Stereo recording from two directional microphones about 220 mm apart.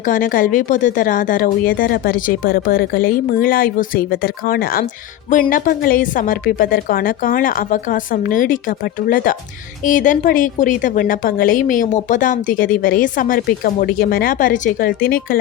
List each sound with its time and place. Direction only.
0.0 s a woman's voice: 35° left (ahead or behind)